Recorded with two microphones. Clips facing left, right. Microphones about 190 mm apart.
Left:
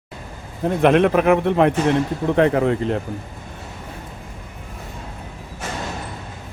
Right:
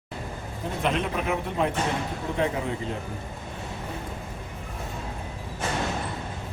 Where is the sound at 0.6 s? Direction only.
65° left (ahead or behind).